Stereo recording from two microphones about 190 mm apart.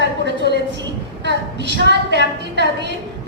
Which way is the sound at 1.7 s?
65° right (ahead or behind).